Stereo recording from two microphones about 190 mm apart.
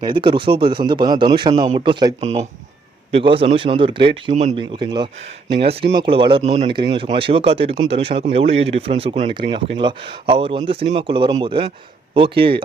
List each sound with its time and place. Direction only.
0.0 s speech: 25° right (ahead or behind)
4.5 s speech: 25° right (ahead or behind)